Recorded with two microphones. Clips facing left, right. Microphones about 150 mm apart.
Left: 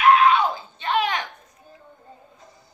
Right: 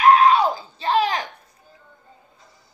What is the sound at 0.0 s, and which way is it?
Screaming, 35° right (ahead or behind).